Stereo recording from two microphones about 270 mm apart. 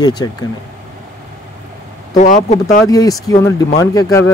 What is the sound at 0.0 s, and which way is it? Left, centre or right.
Speech, centre.